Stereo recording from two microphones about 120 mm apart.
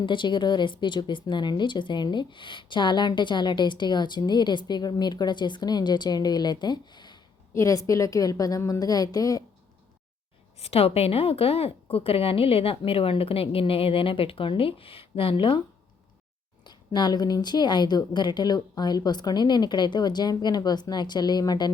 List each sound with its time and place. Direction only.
0.0 s speech: 40° left (ahead or behind)
7.5 s a woman's voice: 25° left (ahead or behind)
10.6 s a woman's voice: 55° left (ahead or behind)
16.6 s speech: 35° left (ahead or behind)